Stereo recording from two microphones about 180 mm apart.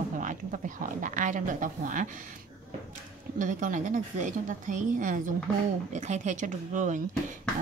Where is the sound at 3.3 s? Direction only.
45° right (ahead or behind).